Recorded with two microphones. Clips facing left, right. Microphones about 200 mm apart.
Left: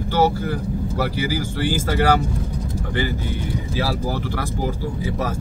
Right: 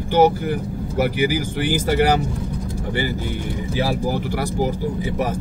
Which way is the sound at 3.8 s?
15° right (ahead or behind).